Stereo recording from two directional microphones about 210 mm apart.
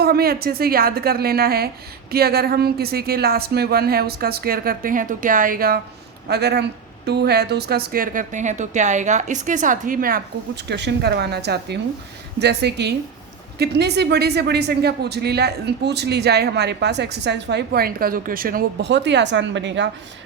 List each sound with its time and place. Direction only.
0.0 s a woman's voice: 45° right (ahead or behind)